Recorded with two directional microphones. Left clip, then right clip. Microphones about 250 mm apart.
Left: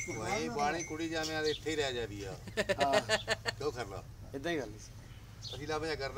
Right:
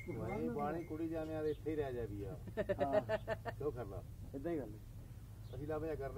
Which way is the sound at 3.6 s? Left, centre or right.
Left.